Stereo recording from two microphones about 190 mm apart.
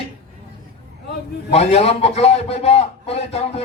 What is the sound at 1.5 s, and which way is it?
A man's voice, 30° left (ahead or behind).